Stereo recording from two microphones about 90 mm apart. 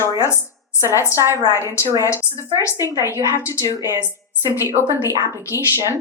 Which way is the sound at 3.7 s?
35° right (ahead or behind).